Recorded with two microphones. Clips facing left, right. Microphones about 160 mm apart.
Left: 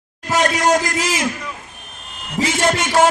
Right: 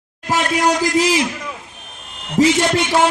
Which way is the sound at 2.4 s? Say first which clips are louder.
Left 1 dB; 45° left (ahead or behind).